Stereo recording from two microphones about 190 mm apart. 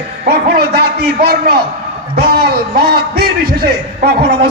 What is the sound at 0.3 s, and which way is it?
A man's voice, 55° right (ahead or behind).